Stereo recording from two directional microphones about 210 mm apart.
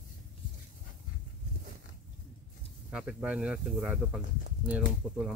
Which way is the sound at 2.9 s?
5° right (ahead or behind).